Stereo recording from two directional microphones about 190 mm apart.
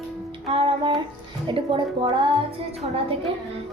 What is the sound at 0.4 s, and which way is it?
Music, 30° right (ahead or behind).